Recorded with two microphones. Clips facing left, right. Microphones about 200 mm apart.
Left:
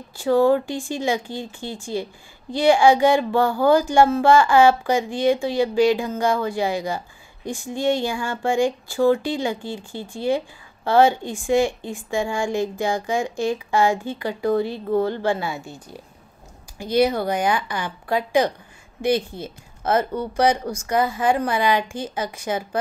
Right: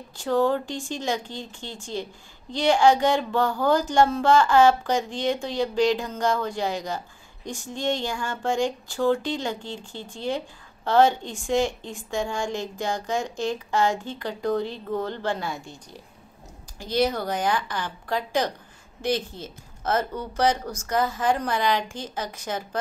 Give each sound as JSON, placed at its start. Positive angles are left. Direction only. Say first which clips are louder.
{"t": 0.2, "sound": "speech", "louder": "left 5 dB", "side_deg": 10}